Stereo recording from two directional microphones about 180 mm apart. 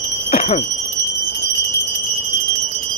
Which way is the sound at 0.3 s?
35° left (ahead or behind).